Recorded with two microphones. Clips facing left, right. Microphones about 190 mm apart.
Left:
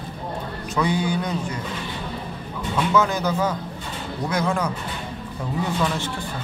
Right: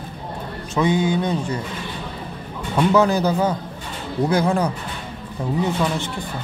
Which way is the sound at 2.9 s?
35° right (ahead or behind).